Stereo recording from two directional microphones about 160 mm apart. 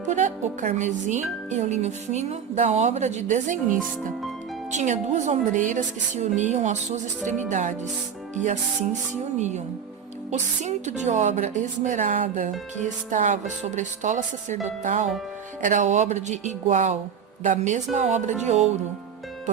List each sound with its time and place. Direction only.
0.1 s a woman's voice: 50° right (ahead or behind)
10.3 s a woman's voice: 45° right (ahead or behind)